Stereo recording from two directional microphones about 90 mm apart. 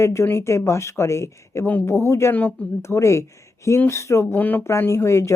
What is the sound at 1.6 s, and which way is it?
Speech, 20° left (ahead or behind).